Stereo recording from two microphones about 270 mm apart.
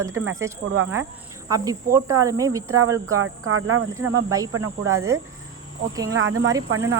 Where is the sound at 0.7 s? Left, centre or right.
Right.